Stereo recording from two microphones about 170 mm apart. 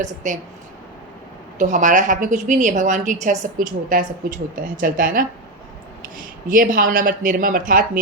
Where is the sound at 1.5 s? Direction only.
45° right (ahead or behind).